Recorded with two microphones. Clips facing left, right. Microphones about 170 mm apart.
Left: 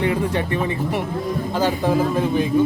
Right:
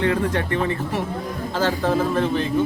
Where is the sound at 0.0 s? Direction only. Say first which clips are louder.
Even; 10° left (ahead or behind).